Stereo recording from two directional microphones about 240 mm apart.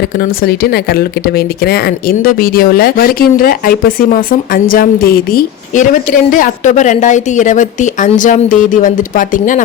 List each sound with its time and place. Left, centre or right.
0.4 s a woman's voice: left